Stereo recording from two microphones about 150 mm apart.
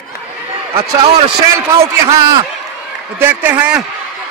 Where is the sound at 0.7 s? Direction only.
40° right (ahead or behind).